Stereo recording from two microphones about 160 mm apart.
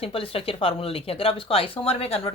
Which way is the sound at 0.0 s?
35° left (ahead or behind).